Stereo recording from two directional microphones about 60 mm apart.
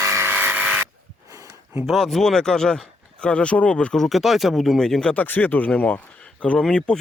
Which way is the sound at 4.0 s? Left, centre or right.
Centre.